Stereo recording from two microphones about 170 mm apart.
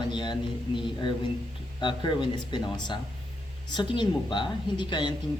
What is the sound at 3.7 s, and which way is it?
Speech, 25° left (ahead or behind).